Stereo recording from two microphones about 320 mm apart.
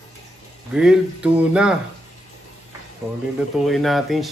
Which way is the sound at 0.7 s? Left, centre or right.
Centre.